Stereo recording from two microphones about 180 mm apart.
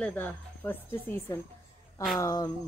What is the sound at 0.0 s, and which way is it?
Speech, 10° left (ahead or behind).